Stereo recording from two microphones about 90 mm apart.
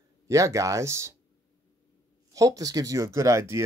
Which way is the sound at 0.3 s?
35° right (ahead or behind).